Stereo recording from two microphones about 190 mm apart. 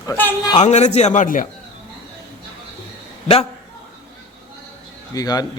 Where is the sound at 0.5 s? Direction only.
35° left (ahead or behind).